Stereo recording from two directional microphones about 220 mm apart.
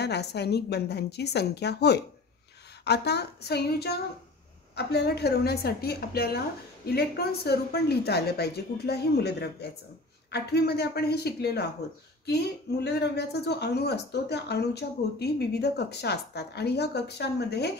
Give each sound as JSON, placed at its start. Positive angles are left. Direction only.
{"t": 0.0, "sound": "a woman's voice", "side_deg": 50}